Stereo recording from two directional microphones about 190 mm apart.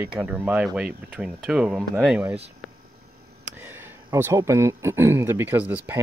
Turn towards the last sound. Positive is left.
turn(degrees=-10)  # may be behind; listen again after turning